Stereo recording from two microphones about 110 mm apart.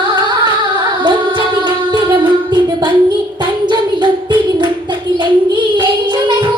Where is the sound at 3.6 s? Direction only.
45° right (ahead or behind).